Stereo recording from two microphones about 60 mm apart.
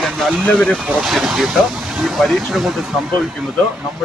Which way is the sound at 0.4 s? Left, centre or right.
Left.